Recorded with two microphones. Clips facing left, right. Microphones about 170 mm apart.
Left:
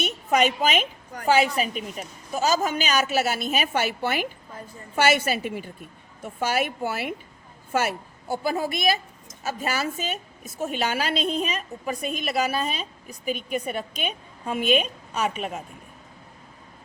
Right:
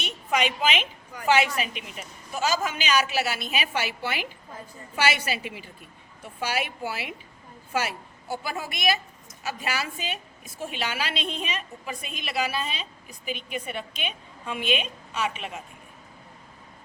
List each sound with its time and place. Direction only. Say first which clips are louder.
0.3 s a woman's voice: left 3 dB; 45° left (ahead or behind)